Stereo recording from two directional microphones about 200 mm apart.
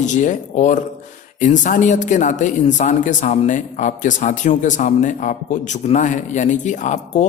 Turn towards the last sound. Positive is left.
turn(degrees=35)  # may be behind; listen again after turning